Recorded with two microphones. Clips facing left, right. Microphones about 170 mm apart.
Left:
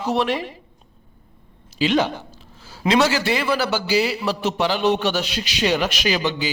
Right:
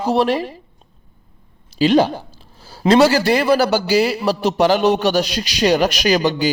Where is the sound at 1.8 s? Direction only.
35° right (ahead or behind).